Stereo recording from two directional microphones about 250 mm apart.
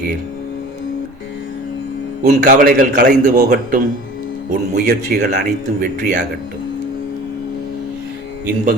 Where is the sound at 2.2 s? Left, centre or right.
Right.